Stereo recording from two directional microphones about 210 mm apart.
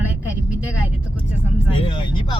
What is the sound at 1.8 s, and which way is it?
Speech, 25° left (ahead or behind).